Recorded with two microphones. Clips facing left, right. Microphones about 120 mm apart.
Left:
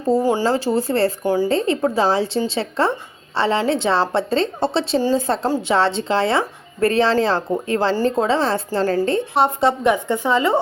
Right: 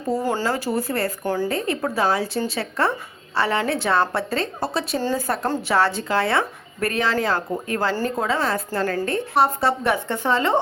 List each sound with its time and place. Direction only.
0.3 s a woman's voice: 15° left (ahead or behind)
0.6 s speech: 25° left (ahead or behind)
1.2 s a woman's voice: 15° left (ahead or behind)
1.5 s a woman's voice: 25° left (ahead or behind)